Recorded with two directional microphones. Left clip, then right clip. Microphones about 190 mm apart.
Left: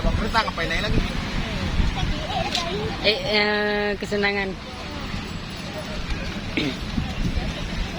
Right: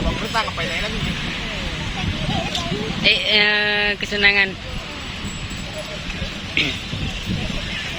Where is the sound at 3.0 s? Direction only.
25° left (ahead or behind).